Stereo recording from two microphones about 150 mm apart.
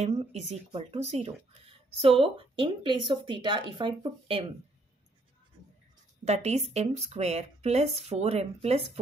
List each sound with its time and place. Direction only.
0.0 s speech: 45° right (ahead or behind)
6.2 s speech: 45° right (ahead or behind)